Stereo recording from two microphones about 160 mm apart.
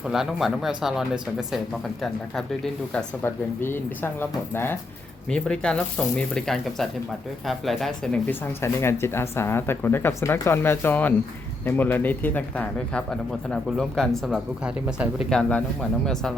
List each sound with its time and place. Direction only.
0.1 s speech: centre (ahead or behind)
2.9 s speech: 15° left (ahead or behind)
8.6 s speech: 15° left (ahead or behind)